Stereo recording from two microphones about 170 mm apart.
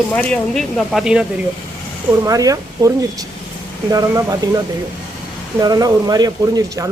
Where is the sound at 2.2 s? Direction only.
20° right (ahead or behind).